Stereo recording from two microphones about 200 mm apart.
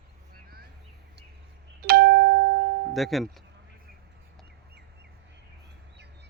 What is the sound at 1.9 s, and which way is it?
Doorbell, 50° right (ahead or behind).